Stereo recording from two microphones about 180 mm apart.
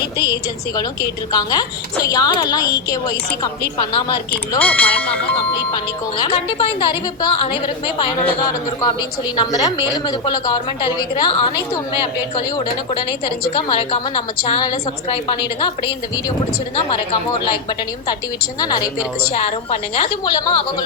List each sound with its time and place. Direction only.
1.3 s a woman's voice: 20° left (ahead or behind)
4.6 s speech: 10° left (ahead or behind)
5.7 s a woman's voice: 25° left (ahead or behind)
19.3 s a woman's voice: 35° left (ahead or behind)